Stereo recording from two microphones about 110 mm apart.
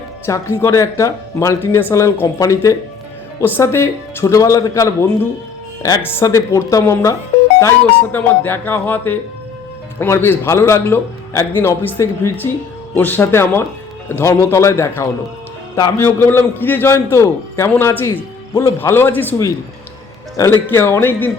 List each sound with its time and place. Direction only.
0.3 s speech: 30° left (ahead or behind)
20.3 s speech: 30° left (ahead or behind)